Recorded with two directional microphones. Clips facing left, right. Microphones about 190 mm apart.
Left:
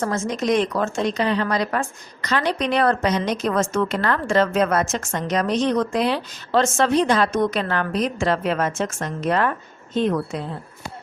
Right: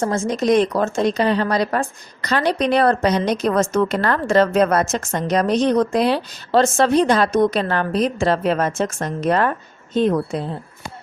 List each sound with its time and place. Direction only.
0.0 s speech: 30° right (ahead or behind)